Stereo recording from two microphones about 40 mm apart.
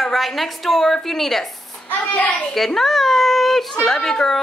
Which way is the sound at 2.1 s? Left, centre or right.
Left.